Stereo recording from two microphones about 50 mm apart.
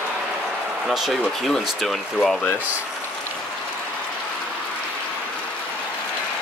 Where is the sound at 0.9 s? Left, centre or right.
Centre.